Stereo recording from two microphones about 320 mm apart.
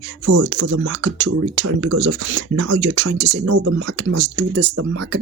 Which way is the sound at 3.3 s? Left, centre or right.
Right.